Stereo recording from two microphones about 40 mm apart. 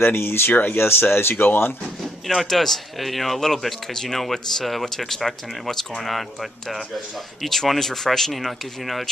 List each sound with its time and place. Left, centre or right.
0.0 s speech: left
0.7 s speech: left
2.2 s speech: centre
7.4 s speech: centre